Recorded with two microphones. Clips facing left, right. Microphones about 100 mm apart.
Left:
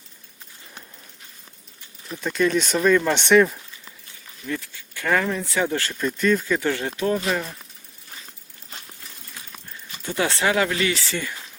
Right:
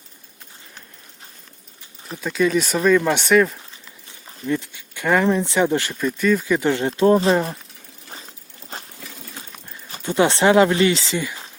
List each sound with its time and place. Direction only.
2.2 s speech: centre (ahead or behind)
4.4 s speech: 20° right (ahead or behind)
6.0 s speech: 5° right (ahead or behind)
6.6 s speech: 25° right (ahead or behind)
10.0 s speech: 25° right (ahead or behind)